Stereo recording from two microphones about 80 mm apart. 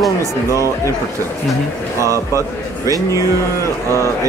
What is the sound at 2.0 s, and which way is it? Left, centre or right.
Music, right.